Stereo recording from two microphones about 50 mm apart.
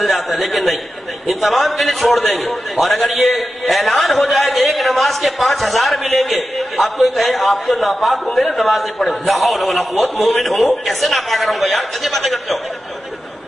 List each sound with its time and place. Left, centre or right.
0.0 s a man's voice: centre